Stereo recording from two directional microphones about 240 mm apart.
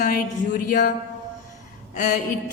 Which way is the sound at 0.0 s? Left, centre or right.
Left.